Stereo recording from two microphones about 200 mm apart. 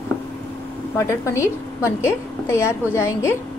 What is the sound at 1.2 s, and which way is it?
A woman's voice, 15° left (ahead or behind).